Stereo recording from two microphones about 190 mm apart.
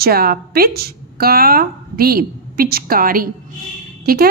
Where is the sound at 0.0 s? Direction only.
50° right (ahead or behind).